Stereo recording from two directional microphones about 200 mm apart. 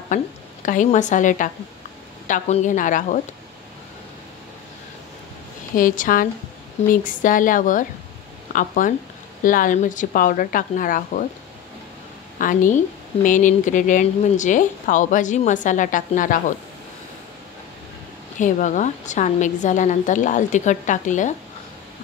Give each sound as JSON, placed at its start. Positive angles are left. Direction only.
{"t": 0.1, "sound": "a woman's voice", "side_deg": 40}
{"t": 5.8, "sound": "speech", "side_deg": 40}
{"t": 12.4, "sound": "speech", "side_deg": 40}
{"t": 18.4, "sound": "speech", "side_deg": 40}